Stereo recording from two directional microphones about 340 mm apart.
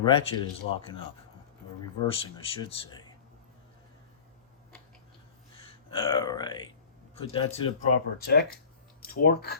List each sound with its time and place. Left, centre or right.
0.0 s speech: centre
2.0 s speech: centre
5.6 s grunt: centre
7.3 s speech: centre